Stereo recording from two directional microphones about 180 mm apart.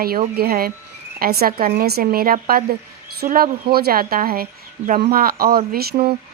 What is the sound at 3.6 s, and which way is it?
A woman's voice, 60° right (ahead or behind).